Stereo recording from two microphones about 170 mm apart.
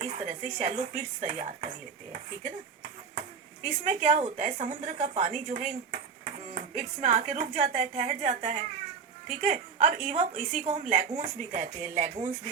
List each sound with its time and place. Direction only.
0.0 s speech: 45° right (ahead or behind)
3.6 s a woman's voice: 45° right (ahead or behind)